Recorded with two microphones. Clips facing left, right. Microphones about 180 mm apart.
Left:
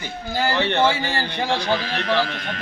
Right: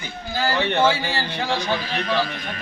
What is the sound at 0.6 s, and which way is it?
Speech, 15° right (ahead or behind).